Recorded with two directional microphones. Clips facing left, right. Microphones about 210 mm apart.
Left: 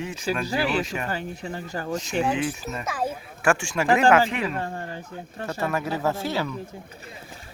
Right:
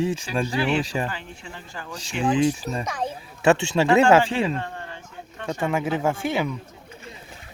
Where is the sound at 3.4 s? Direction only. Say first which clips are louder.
Right 4 dB; 25° right (ahead or behind).